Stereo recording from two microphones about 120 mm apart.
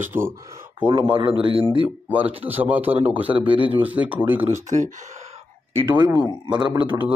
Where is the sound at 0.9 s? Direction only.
50° right (ahead or behind).